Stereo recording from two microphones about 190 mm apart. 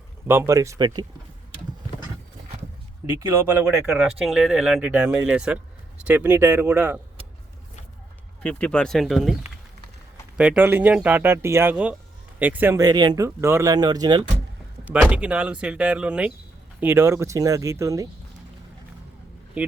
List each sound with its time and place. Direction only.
0.3 s speech: 15° right (ahead or behind)
3.2 s speech: 15° right (ahead or behind)
8.4 s speech: 5° left (ahead or behind)
10.3 s speech: 5° right (ahead or behind)
14.8 s speech: 5° right (ahead or behind)
19.6 s speech: 10° right (ahead or behind)